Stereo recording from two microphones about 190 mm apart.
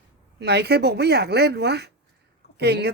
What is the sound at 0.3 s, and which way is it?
Speech, 60° right (ahead or behind).